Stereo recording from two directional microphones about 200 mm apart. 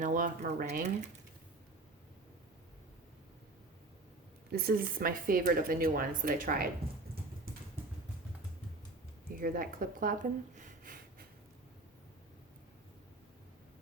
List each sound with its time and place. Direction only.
0.0 s speech: 40° right (ahead or behind)
4.5 s speech: 45° right (ahead or behind)
9.4 s speech: 45° right (ahead or behind)